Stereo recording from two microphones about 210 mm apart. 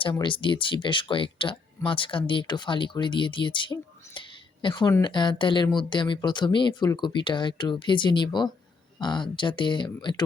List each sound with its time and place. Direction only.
0.0 s speech: 25° left (ahead or behind)